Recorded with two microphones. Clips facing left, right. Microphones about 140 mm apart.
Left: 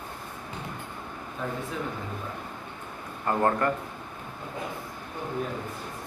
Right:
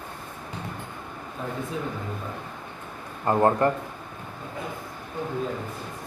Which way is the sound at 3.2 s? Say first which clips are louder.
Right 4 dB; 25° right (ahead or behind).